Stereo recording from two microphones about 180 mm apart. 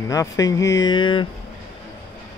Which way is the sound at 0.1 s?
20° left (ahead or behind).